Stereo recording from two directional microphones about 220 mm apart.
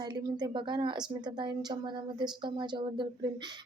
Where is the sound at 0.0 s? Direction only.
20° right (ahead or behind).